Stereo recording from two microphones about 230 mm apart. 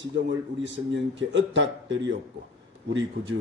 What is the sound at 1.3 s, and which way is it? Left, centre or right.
A man's voice, right.